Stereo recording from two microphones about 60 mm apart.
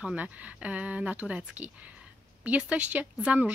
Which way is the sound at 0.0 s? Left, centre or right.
Right.